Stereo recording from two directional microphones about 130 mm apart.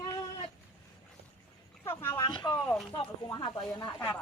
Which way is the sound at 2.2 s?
35° left (ahead or behind).